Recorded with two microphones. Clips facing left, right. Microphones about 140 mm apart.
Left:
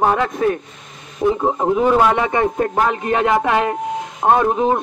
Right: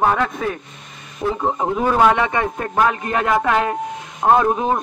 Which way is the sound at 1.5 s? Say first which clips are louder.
Left 4 dB; 5° left (ahead or behind).